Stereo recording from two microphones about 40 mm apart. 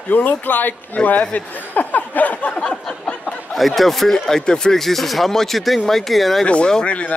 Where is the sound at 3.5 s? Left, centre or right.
Centre.